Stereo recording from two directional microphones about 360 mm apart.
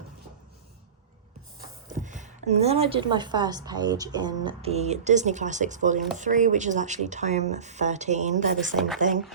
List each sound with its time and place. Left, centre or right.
1.9 s speech: right